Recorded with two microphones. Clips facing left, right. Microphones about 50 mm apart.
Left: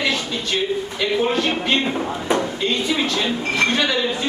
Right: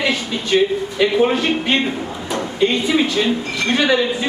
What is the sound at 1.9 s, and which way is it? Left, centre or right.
Speech, left.